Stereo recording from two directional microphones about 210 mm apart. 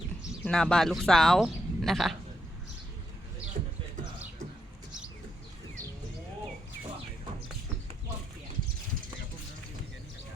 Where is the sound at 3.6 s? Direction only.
35° right (ahead or behind).